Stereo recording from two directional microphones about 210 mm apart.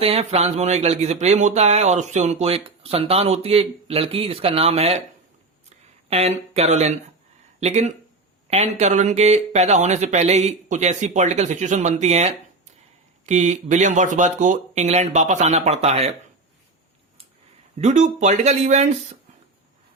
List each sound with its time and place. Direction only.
0.0 s speech: 30° right (ahead or behind)
5.6 s a sound: 30° right (ahead or behind)
7.6 s speech: 30° right (ahead or behind)
17.7 s speech: 35° right (ahead or behind)